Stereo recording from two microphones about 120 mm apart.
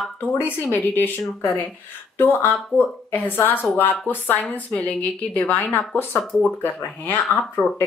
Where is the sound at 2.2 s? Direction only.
15° left (ahead or behind).